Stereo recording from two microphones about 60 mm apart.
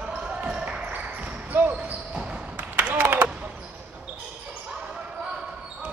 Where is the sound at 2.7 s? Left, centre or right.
Right.